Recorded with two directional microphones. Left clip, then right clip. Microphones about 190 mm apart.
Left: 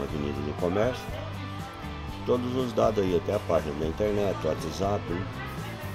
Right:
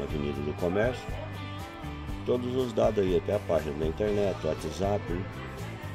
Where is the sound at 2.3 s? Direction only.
15° right (ahead or behind).